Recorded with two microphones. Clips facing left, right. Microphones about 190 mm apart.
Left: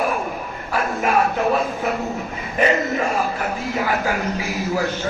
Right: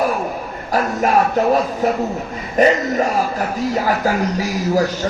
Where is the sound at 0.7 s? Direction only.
40° right (ahead or behind).